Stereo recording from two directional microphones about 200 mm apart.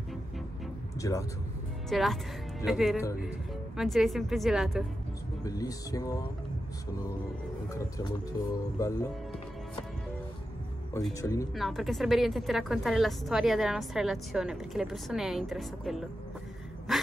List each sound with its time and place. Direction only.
1.0 s speech: 15° left (ahead or behind)
1.9 s a woman's voice: centre (ahead or behind)
5.4 s speech: 20° left (ahead or behind)
7.7 s speech: 20° left (ahead or behind)
11.1 s speech: 15° left (ahead or behind)
11.5 s a woman's voice: centre (ahead or behind)